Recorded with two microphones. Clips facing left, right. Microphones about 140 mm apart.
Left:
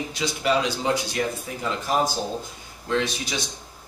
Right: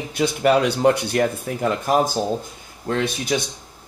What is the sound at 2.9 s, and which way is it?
Speech, 55° right (ahead or behind).